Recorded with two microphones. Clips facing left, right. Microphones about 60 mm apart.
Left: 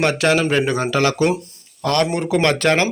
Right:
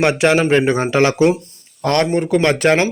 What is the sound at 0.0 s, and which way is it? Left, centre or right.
A man's voice, right.